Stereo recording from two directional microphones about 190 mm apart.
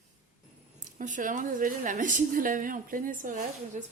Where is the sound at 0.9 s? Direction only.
40° right (ahead or behind).